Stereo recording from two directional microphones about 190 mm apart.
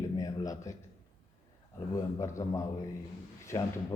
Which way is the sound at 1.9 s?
15° left (ahead or behind).